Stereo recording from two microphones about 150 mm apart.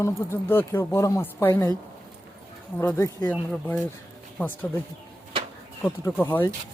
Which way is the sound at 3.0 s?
15° left (ahead or behind).